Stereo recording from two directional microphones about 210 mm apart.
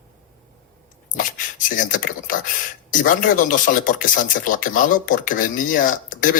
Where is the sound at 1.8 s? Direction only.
40° left (ahead or behind).